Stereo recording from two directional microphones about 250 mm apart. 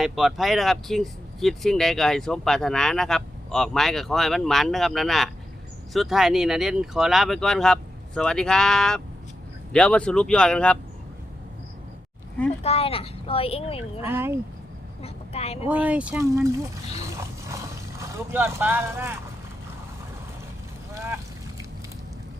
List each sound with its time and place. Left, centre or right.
0.0 s speech: centre
12.6 s a child's voice: left
14.1 s speech: centre
15.0 s vehicle: left
15.6 s speech: centre
17.0 s vehicle: centre